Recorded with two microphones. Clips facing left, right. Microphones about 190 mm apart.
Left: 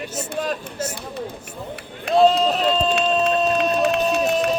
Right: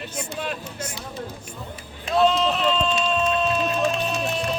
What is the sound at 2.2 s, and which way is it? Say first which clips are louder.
Run: left 3 dB; 40° left (ahead or behind).